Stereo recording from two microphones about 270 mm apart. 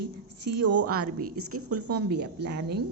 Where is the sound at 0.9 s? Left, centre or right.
Right.